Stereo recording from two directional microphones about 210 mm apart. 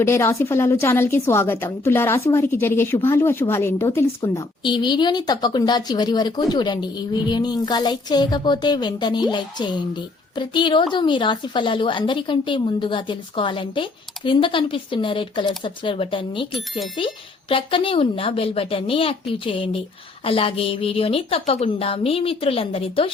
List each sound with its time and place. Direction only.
0.0 s a woman's voice: 15° left (ahead or behind)
17.5 s a woman's voice: 25° left (ahead or behind)